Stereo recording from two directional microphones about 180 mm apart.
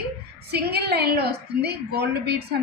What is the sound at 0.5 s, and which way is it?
A woman's voice, 65° right (ahead or behind).